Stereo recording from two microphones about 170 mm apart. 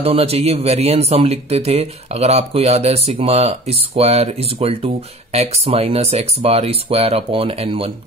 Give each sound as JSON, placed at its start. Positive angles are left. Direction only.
{"t": 0.0, "sound": "speech", "side_deg": -35}